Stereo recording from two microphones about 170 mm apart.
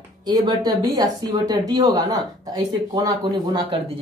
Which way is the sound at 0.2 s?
20° right (ahead or behind).